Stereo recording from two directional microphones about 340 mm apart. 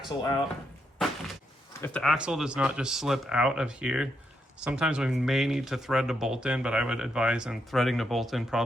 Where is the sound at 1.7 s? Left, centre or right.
Centre.